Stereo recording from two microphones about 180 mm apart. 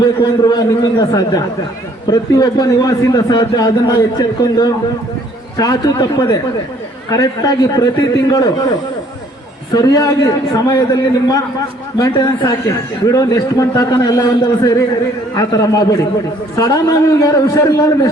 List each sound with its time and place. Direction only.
0.0 s a man's voice: 20° left (ahead or behind)
9.7 s a man's voice: 20° left (ahead or behind)